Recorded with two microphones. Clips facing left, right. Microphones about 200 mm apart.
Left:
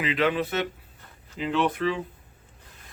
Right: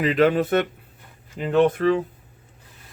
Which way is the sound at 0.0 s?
45° right (ahead or behind).